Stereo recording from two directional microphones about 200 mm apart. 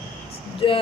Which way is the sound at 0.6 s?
25° left (ahead or behind).